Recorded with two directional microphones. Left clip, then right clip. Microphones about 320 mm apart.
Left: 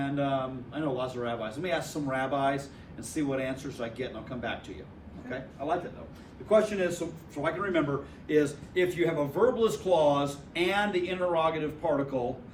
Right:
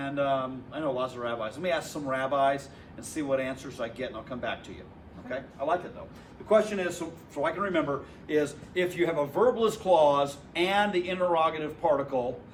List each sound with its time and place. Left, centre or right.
0.0 s a man's voice: centre